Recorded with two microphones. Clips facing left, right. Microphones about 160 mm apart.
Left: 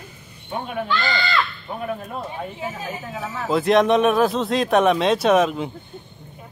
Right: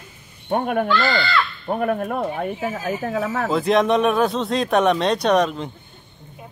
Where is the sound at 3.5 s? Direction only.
Centre (ahead or behind).